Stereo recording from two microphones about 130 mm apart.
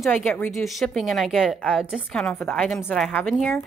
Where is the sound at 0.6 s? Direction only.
Centre (ahead or behind).